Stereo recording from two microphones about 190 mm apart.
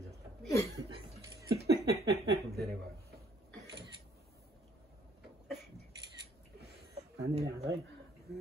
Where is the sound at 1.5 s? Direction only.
55° right (ahead or behind).